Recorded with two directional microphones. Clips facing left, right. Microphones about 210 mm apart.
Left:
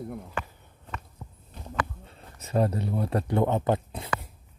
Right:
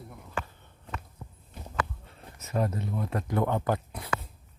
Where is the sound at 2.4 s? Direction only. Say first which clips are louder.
Left 4 dB; 30° left (ahead or behind).